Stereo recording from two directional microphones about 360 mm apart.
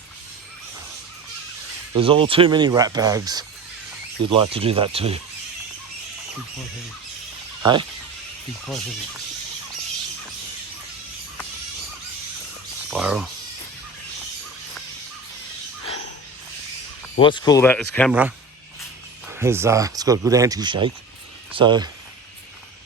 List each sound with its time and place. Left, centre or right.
2.0 s speech: centre
7.6 s speech: centre
12.9 s speech: centre
17.2 s speech: centre